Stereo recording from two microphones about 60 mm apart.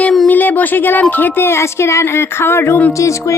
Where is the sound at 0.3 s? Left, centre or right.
Left.